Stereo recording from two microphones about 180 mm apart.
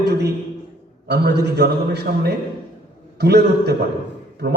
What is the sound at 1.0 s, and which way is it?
A man's voice, 65° right (ahead or behind).